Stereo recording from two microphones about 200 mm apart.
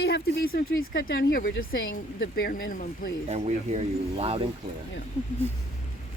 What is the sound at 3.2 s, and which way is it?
Speech, 35° right (ahead or behind).